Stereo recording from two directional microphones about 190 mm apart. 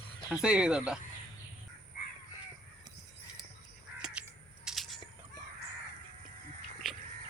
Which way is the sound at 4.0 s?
5° right (ahead or behind).